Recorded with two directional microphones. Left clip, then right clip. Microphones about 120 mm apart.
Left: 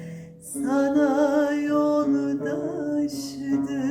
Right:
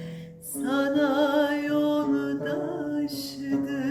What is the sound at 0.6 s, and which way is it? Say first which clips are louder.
Music: left 3 dB; 35° right (ahead or behind).